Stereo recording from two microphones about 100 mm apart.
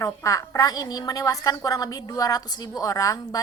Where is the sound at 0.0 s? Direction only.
35° left (ahead or behind).